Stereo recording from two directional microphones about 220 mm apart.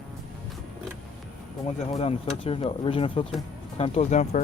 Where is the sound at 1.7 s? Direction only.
30° left (ahead or behind).